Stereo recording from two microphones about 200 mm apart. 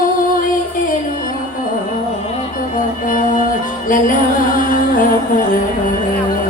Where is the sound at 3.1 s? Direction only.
40° left (ahead or behind).